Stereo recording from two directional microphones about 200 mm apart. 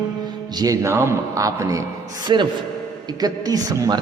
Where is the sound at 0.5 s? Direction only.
15° right (ahead or behind).